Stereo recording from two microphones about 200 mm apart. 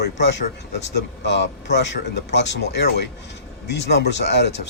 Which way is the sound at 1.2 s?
60° left (ahead or behind).